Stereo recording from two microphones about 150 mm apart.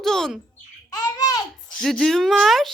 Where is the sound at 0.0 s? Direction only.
5° left (ahead or behind).